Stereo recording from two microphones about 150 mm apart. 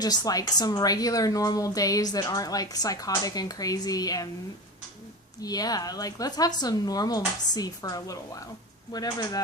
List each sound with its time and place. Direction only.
0.0 s a woman's voice: 25° left (ahead or behind)
5.4 s a woman's voice: 25° left (ahead or behind)